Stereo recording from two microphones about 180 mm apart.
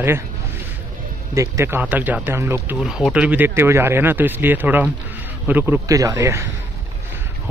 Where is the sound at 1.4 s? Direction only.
15° right (ahead or behind).